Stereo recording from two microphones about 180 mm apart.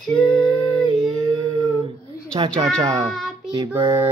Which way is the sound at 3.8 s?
25° right (ahead or behind).